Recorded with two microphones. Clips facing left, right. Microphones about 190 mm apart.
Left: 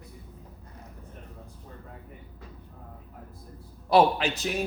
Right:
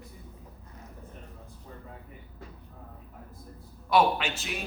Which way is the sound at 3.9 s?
35° left (ahead or behind).